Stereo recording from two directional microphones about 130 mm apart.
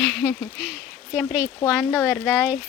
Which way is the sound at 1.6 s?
20° left (ahead or behind).